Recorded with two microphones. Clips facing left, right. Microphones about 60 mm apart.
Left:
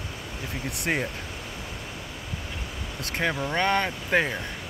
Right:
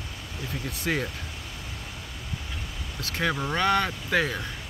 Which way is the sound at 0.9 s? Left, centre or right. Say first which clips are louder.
Left 1 dB; left.